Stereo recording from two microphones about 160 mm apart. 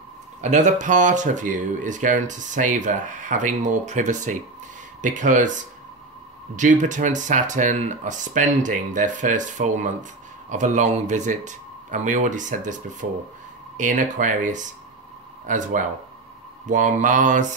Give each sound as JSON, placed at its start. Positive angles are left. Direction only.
{"t": 0.4, "sound": "speech", "side_deg": -50}